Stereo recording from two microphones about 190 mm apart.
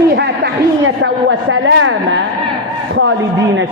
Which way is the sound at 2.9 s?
75° right (ahead or behind).